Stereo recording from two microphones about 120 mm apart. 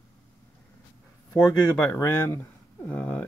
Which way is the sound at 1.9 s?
20° left (ahead or behind).